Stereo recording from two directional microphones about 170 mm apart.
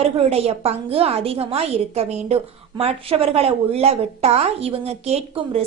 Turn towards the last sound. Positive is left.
turn(degrees=-40)  # may be behind; listen again after turning